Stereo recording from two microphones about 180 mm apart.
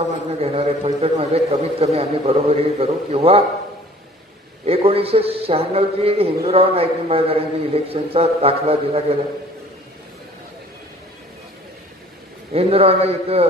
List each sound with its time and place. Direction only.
0.4 s a man's voice: 35° right (ahead or behind)
4.6 s a man's voice: 35° right (ahead or behind)
12.5 s a man's voice: 35° right (ahead or behind)